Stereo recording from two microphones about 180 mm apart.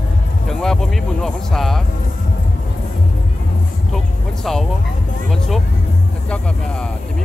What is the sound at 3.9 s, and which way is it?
Music, centre (ahead or behind).